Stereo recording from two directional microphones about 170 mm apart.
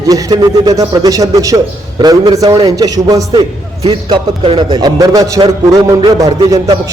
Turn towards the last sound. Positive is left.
turn(degrees=-20)  # may be behind; listen again after turning